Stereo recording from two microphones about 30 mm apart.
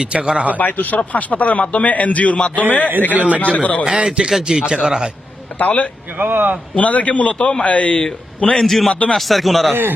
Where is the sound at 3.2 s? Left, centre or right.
Right.